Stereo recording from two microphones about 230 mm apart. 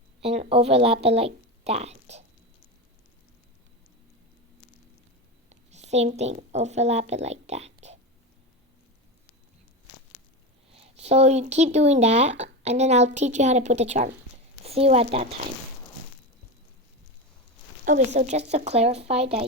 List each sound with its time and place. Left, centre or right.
0.2 s a woman's voice: right
5.5 s a woman's voice: right
10.7 s speech: right
18.1 s speech: right